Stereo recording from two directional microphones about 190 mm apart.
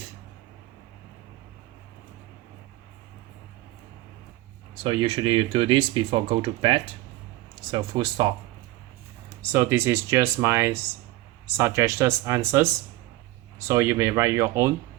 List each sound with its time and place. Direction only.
4.8 s speech: 30° right (ahead or behind)
9.4 s speech: 10° right (ahead or behind)